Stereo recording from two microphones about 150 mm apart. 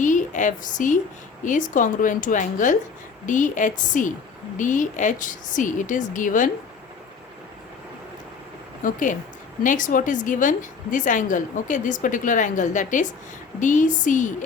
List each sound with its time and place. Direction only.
0.0 s a sound: 55° left (ahead or behind)
1.5 s a woman's voice: 60° left (ahead or behind)
8.8 s a woman's voice: 60° left (ahead or behind)